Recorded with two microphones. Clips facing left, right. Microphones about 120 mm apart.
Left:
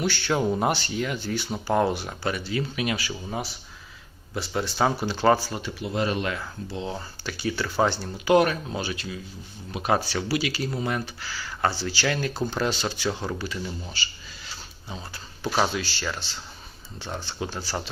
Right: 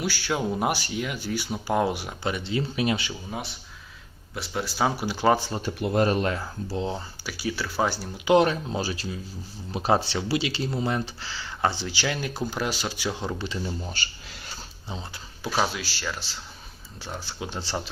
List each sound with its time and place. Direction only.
0.0 s speech: 5° right (ahead or behind); by 3.1 s 30° right (ahead or behind)
3.1 s speech: centre (ahead or behind)
5.6 s speech: 50° right (ahead or behind)
7.3 s speech: 5° right (ahead or behind)
8.3 s speech: 25° right (ahead or behind)
14.0 s speech: 50° right (ahead or behind)
15.4 s speech: centre (ahead or behind)
17.5 s speech: 25° right (ahead or behind)